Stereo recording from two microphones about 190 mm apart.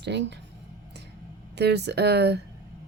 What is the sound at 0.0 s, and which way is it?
Speech, 65° right (ahead or behind).